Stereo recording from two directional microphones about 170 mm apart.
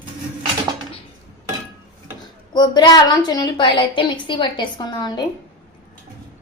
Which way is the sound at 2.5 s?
25° left (ahead or behind).